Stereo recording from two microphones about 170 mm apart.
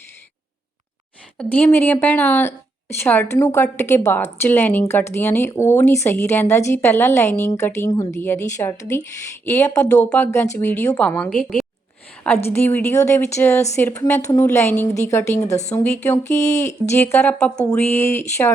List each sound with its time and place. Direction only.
1.4 s a woman's voice: 10° left (ahead or behind)
12.5 s a woman's voice: 10° left (ahead or behind)